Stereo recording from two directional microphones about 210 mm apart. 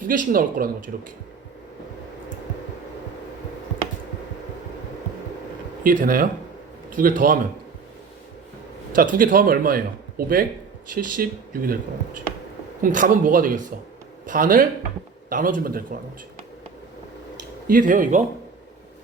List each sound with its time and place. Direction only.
0.1 s a man's voice: 40° right (ahead or behind)
5.8 s a man's voice: 40° right (ahead or behind)
9.0 s a man's voice: 40° right (ahead or behind)
12.8 s a man's voice: 40° right (ahead or behind)
17.7 s a man's voice: 40° right (ahead or behind)